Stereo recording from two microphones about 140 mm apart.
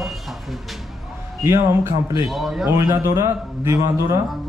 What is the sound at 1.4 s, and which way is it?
Speech, 20° right (ahead or behind).